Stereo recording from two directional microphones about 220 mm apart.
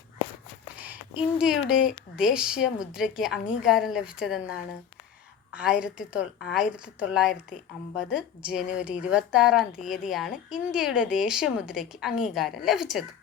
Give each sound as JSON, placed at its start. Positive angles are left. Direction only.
{"t": 0.8, "sound": "a woman's voice", "side_deg": -5}